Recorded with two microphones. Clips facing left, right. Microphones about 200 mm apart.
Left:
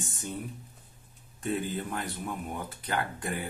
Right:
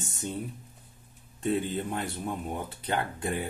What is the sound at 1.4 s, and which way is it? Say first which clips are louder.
Speech: right 3 dB; 25° right (ahead or behind).